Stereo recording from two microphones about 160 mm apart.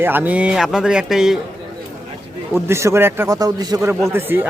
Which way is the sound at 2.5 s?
15° right (ahead or behind).